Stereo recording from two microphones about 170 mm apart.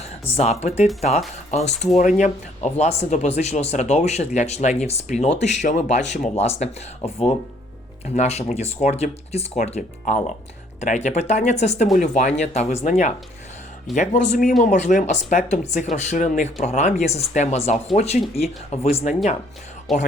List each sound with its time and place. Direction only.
0.0 s speech: 40° left (ahead or behind)
8.0 s speech: 40° left (ahead or behind)
19.9 s speech: centre (ahead or behind)